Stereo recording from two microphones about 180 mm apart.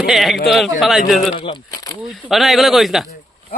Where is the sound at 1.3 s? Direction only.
25° left (ahead or behind).